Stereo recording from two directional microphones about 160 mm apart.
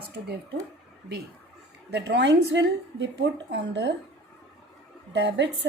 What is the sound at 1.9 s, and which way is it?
A woman's voice, 90° right.